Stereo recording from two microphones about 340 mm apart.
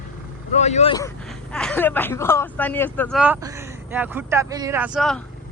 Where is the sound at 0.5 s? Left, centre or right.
Centre.